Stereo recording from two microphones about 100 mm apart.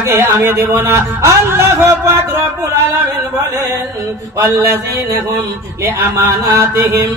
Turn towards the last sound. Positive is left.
turn(degrees=-30)  # may be behind; listen again after turning